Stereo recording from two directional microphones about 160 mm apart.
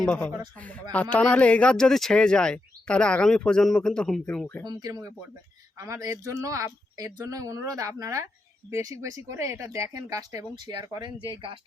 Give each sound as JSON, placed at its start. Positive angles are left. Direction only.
{"t": 0.0, "sound": "speech", "side_deg": 10}
{"t": 4.6, "sound": "a woman's voice", "side_deg": -25}